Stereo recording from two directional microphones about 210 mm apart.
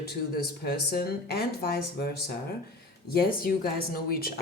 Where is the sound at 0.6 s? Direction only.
45° left (ahead or behind).